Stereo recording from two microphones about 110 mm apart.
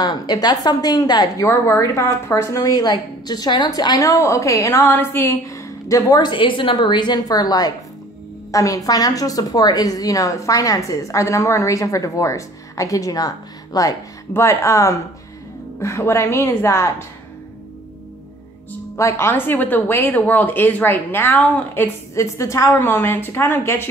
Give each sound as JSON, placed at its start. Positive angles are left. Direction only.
{"t": 0.0, "sound": "a woman's voice", "side_deg": 40}
{"t": 1.5, "sound": "a woman's voice", "side_deg": 25}
{"t": 4.1, "sound": "a woman's voice", "side_deg": 25}
{"t": 18.9, "sound": "a woman's voice", "side_deg": 25}